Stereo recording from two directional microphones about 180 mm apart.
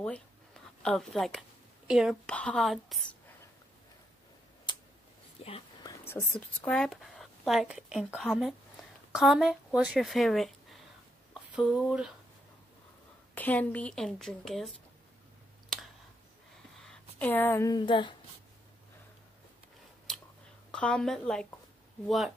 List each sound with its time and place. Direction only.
0.8 s speech: 5° left (ahead or behind)
5.4 s a sound: 30° left (ahead or behind)
5.9 s speech: 15° left (ahead or behind)
6.7 s speech: centre (ahead or behind)
13.3 s speech: 10° left (ahead or behind)
15.7 s clicking: centre (ahead or behind)
16.8 s speech: 10° left (ahead or behind); by 18.1 s 25° left (ahead or behind)
20.1 s a sound: centre (ahead or behind)
20.7 s speech: 5° left (ahead or behind)